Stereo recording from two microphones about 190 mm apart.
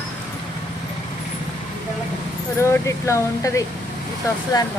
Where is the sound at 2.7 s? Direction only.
15° left (ahead or behind).